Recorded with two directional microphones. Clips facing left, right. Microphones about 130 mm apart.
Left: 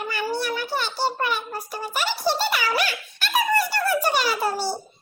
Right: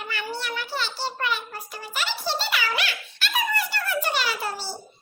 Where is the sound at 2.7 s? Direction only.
40° left (ahead or behind).